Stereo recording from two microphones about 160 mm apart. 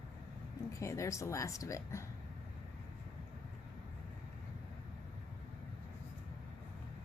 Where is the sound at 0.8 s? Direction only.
20° left (ahead or behind).